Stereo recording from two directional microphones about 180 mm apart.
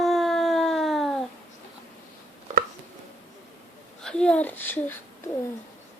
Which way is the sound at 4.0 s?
5° left (ahead or behind).